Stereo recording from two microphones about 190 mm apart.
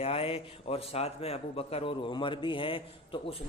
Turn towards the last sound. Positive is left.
turn(degrees=30)  # may be behind; listen again after turning